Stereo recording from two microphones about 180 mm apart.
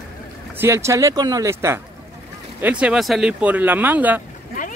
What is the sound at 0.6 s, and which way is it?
Speech, 15° right (ahead or behind).